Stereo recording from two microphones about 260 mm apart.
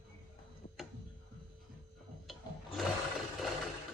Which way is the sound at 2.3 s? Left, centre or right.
Centre.